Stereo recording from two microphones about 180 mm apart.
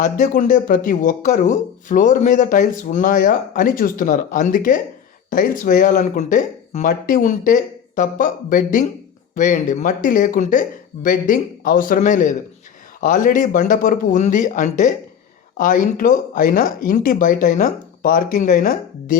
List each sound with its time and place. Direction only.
0.0 s speech: 45° left (ahead or behind)